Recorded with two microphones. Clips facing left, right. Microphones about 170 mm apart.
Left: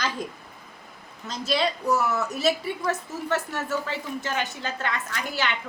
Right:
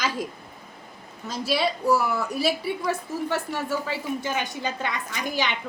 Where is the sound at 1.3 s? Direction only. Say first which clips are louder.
Right 1 dB; 10° right (ahead or behind).